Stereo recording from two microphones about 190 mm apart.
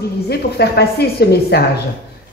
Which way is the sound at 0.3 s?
60° left (ahead or behind).